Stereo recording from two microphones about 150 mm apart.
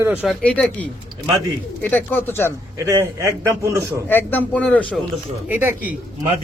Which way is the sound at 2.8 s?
20° right (ahead or behind).